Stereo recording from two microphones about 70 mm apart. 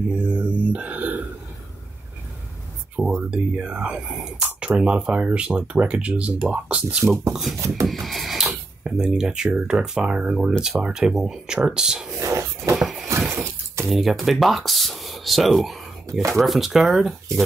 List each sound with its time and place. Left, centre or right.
0.1 s mantra: centre
3.3 s speech: centre
7.8 s speech: centre
8.5 s speech: centre
12.2 s a sound: right
12.7 s a sound: centre
13.3 s a sound: right
13.8 s speech: centre
16.1 s speech: right
16.3 s speech: centre